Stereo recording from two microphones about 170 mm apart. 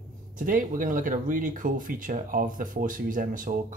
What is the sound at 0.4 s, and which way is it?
Speech, 55° right (ahead or behind).